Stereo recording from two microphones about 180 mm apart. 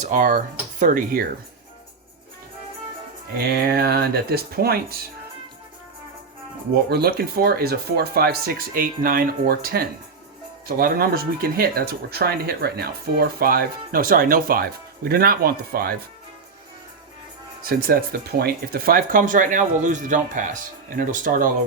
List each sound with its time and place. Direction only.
0.0 s speech: 45° right (ahead or behind)
3.3 s speech: 60° right (ahead or behind)
6.9 s speech: 60° right (ahead or behind)
17.7 s speech: 55° right (ahead or behind)